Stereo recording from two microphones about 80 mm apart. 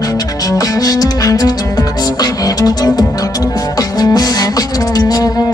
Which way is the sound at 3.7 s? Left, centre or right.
Left.